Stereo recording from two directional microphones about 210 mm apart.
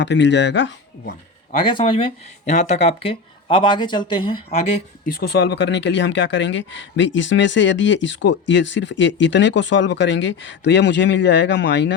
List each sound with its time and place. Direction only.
0.0 s speech: 60° left (ahead or behind)
1.6 s speech: 25° left (ahead or behind)
5.1 s speech: 50° left (ahead or behind)